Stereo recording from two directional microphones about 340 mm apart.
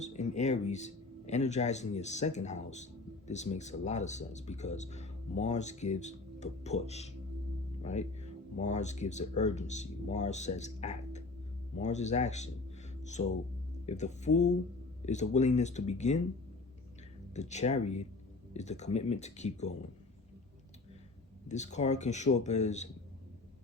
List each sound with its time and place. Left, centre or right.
0.0 s speech: centre
8.2 s speech: centre
17.3 s speech: centre
21.4 s speech: centre